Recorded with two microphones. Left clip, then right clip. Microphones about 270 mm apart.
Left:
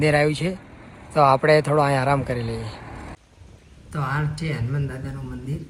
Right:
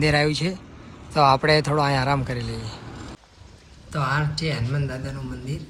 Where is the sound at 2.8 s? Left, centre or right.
Left.